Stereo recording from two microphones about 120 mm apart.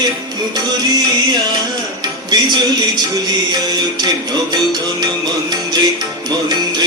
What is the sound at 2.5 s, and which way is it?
Music, 35° right (ahead or behind).